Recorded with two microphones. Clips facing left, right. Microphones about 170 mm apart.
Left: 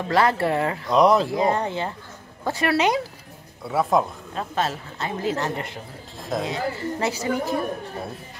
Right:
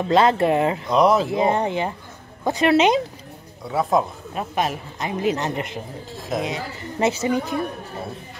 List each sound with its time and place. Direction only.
0.1 s a woman's voice: 20° right (ahead or behind)
0.9 s speech: centre (ahead or behind)
1.3 s a woman's voice: 20° right (ahead or behind)
3.6 s speech: centre (ahead or behind)
4.3 s a man's voice: 15° right (ahead or behind)